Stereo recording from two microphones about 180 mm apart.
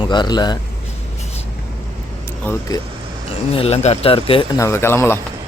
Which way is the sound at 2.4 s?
10° left (ahead or behind).